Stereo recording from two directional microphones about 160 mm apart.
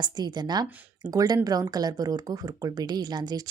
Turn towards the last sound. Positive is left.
turn(degrees=-25)  # may be behind; listen again after turning